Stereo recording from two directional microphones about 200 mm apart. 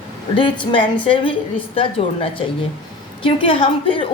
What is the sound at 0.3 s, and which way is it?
A woman's voice, 25° left (ahead or behind).